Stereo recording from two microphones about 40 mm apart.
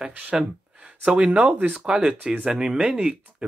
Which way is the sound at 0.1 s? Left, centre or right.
Right.